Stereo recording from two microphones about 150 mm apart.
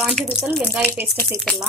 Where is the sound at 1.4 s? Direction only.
Centre (ahead or behind).